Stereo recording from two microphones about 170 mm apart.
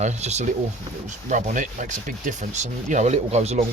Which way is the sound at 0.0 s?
40° right (ahead or behind).